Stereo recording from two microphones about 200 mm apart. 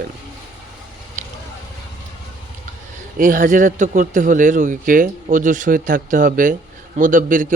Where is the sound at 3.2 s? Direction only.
40° right (ahead or behind).